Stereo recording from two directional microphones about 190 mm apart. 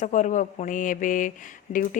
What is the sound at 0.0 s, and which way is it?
A woman's voice, 40° left (ahead or behind).